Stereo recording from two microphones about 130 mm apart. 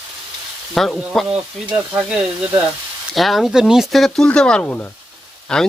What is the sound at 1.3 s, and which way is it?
Sizzle, 5° right (ahead or behind).